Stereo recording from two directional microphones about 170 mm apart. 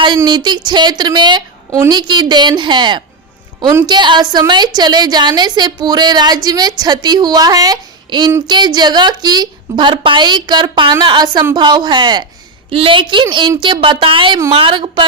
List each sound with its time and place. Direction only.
0.3 s a woman's voice: 25° right (ahead or behind)